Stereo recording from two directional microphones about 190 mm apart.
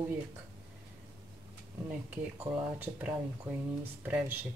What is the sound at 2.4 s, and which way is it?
Speech, 10° right (ahead or behind).